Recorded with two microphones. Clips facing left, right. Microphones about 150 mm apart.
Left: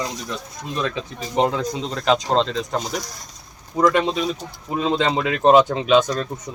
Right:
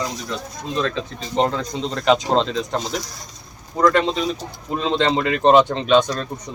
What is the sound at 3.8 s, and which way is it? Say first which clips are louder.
Speech: right 1 dB; 10° left (ahead or behind).